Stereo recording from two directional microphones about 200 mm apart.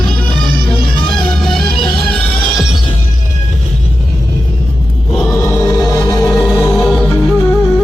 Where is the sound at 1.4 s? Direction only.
Centre (ahead or behind).